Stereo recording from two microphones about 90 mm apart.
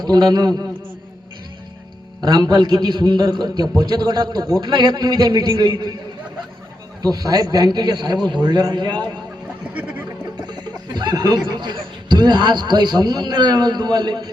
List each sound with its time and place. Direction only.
0.0 s a man's voice: 50° right (ahead or behind)
2.2 s a man's voice: 45° right (ahead or behind)
4.6 s a man's voice: 55° right (ahead or behind)
7.0 s a man's voice: 45° right (ahead or behind)
10.4 s speech: 55° right (ahead or behind)